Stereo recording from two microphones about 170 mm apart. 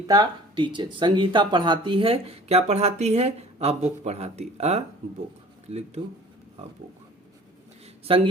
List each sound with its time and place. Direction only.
0.1 s speech: 25° right (ahead or behind)
8.0 s speech: 30° right (ahead or behind)